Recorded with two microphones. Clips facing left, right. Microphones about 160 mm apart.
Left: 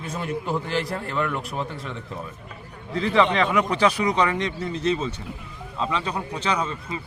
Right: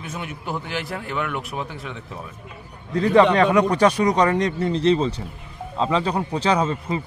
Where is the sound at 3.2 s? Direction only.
40° right (ahead or behind).